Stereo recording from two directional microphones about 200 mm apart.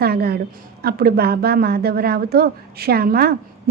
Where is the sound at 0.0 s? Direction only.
50° right (ahead or behind).